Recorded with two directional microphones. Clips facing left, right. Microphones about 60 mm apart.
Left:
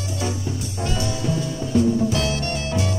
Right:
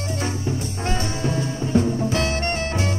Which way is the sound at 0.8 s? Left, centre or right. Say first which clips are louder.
Even; right.